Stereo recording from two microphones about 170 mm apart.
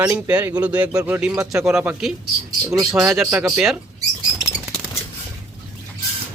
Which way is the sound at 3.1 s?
5° right (ahead or behind).